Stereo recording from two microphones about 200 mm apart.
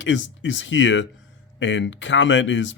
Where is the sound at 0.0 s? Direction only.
65° left (ahead or behind).